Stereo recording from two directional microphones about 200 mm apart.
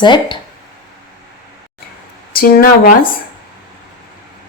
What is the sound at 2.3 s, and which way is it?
Speech, 45° left (ahead or behind).